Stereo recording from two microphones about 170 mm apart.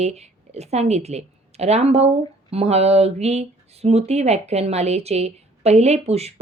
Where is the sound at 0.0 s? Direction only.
40° right (ahead or behind).